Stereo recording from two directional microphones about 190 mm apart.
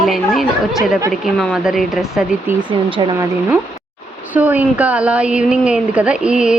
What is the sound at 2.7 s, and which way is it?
Speech, 25° right (ahead or behind).